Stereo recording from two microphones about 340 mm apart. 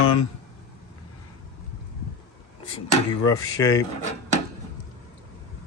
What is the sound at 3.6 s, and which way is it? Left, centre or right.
Speech, centre.